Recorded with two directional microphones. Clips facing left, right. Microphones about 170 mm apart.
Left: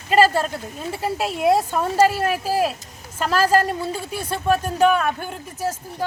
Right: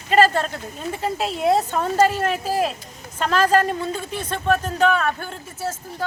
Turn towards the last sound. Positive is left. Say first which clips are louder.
# left 2 dB
turn(degrees=15)  # may be behind; listen again after turning